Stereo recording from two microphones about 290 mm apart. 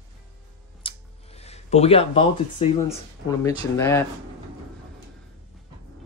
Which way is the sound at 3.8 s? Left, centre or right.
Centre.